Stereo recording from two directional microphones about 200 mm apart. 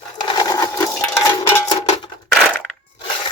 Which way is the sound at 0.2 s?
20° left (ahead or behind).